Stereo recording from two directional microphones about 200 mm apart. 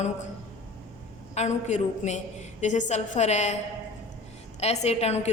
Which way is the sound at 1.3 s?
35° left (ahead or behind).